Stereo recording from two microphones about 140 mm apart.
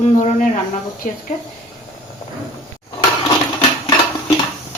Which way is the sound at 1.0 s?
65° left (ahead or behind).